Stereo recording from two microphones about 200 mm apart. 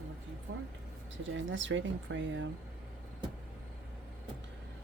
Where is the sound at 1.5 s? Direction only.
65° right (ahead or behind).